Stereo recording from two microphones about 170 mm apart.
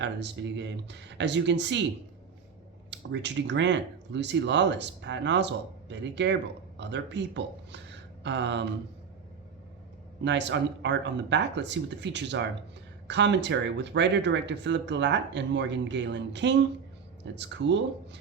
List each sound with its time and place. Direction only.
0.0 s speech: 90° right
2.9 s speech: 90° right
10.2 s speech: 90° right